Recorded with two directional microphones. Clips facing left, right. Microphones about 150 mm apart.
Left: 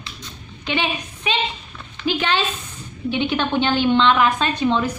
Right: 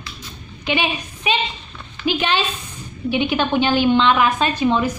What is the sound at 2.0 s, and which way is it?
A woman's voice, 15° right (ahead or behind).